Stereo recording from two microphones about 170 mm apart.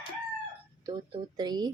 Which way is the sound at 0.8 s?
25° right (ahead or behind).